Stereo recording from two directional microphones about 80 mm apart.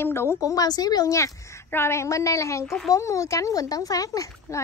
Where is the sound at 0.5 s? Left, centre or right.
Left.